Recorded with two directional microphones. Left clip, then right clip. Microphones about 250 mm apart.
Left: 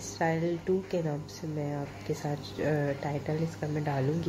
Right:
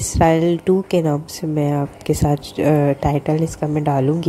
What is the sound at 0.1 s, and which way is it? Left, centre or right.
A woman's voice, right.